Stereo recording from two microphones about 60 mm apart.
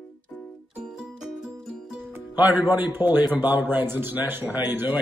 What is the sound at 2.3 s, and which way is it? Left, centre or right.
A man's voice, right.